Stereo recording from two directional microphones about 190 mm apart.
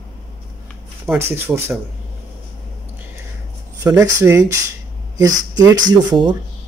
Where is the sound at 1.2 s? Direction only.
10° right (ahead or behind).